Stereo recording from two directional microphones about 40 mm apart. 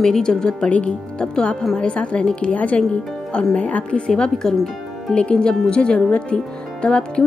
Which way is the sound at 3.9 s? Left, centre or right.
Left.